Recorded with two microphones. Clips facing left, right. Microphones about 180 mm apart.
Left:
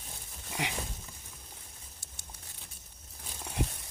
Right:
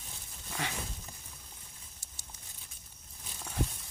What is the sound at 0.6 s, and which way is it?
Dog, 15° left (ahead or behind).